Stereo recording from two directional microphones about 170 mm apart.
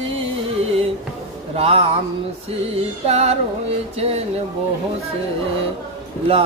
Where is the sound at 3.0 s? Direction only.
40° right (ahead or behind).